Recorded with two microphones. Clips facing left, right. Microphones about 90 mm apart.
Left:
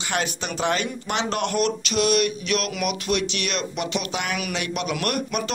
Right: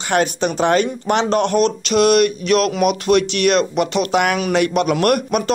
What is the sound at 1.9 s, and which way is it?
Speech, 50° right (ahead or behind).